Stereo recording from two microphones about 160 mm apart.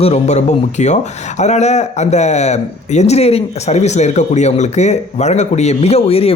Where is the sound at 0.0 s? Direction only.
40° left (ahead or behind).